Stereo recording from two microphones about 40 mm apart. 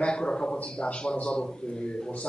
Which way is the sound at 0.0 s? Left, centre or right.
Left.